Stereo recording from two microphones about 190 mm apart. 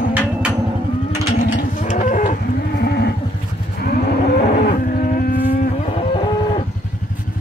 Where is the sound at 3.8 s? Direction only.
55° left (ahead or behind).